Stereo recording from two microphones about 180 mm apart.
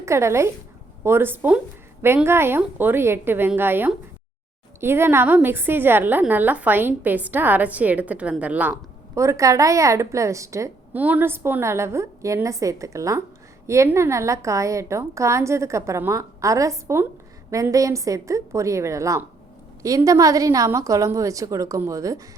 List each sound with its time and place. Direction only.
0.0 s a woman's voice: 15° right (ahead or behind)